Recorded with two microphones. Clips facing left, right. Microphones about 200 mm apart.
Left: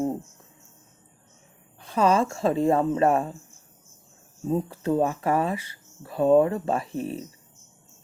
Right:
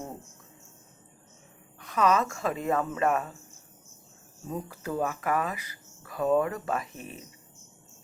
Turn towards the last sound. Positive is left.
turn(degrees=30)  # may be behind; listen again after turning